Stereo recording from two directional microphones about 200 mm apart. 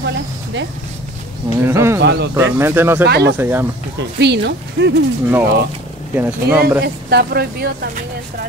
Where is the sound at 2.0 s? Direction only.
55° right (ahead or behind).